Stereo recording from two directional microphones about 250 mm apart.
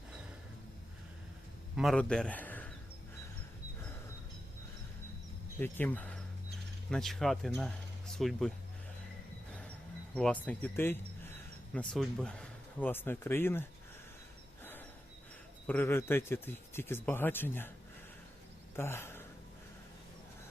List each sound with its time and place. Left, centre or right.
1.7 s a man's voice: centre
5.5 s speech: centre
10.2 s speech: centre
14.6 s snort: centre
15.6 s speech: centre
18.8 s speech: centre